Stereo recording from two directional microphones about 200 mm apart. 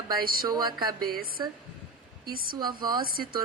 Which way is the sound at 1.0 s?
45° right (ahead or behind).